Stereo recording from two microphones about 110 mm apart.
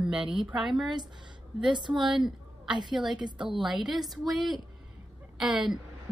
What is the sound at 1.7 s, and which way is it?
Speech, 45° right (ahead or behind).